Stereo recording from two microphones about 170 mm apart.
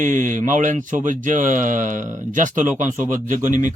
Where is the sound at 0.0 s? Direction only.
50° right (ahead or behind).